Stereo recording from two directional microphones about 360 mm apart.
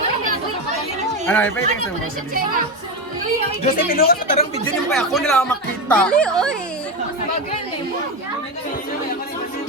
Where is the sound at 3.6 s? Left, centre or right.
Left.